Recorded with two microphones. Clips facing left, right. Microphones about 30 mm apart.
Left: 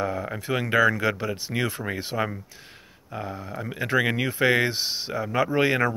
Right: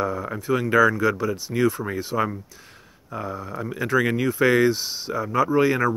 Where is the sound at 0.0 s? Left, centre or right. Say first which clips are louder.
Right 2 dB; left.